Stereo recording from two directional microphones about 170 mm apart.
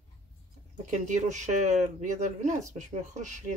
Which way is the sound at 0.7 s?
45° right (ahead or behind).